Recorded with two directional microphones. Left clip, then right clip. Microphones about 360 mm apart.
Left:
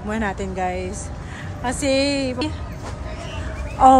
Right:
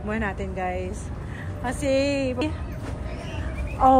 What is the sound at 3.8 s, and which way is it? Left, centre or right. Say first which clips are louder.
Speech: left 6 dB; centre.